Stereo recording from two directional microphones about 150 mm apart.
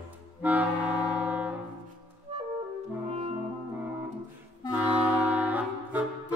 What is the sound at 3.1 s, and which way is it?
Brass instrument, 40° right (ahead or behind).